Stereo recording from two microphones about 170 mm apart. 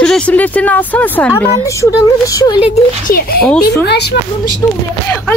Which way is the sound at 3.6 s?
75° left (ahead or behind).